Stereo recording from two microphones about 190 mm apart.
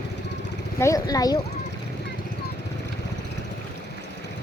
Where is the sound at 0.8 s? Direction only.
15° left (ahead or behind).